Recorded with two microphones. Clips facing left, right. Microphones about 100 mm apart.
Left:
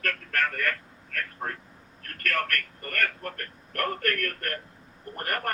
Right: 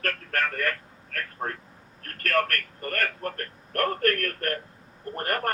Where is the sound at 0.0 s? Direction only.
35° right (ahead or behind).